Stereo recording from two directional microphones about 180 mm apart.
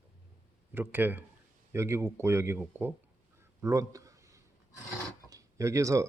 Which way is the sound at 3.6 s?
20° right (ahead or behind).